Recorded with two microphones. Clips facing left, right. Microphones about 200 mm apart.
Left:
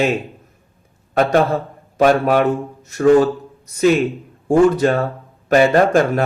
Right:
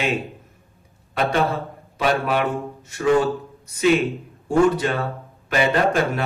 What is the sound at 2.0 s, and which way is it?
A man's voice, 45° left (ahead or behind).